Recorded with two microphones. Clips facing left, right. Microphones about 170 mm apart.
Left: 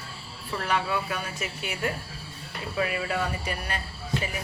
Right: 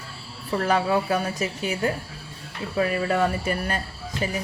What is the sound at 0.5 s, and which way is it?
Speech, 40° right (ahead or behind).